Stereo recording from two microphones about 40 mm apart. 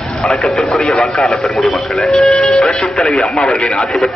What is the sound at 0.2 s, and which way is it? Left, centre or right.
Speech, centre.